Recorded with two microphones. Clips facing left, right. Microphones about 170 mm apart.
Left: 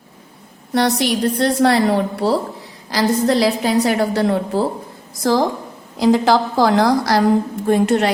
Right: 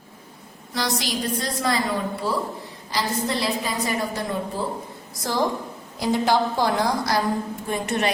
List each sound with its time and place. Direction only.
0.7 s a woman's voice: 65° left (ahead or behind)
2.9 s a woman's voice: 90° left; by 4.6 s 75° left (ahead or behind)
5.2 s a woman's voice: 90° left; by 8.1 s 70° left (ahead or behind)